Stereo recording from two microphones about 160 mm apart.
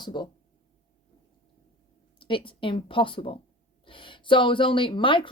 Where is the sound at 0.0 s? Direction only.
30° left (ahead or behind).